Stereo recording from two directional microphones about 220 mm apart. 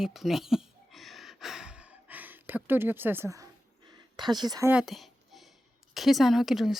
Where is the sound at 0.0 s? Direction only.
Centre (ahead or behind).